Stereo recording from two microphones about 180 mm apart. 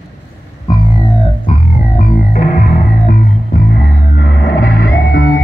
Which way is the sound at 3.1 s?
60° left (ahead or behind).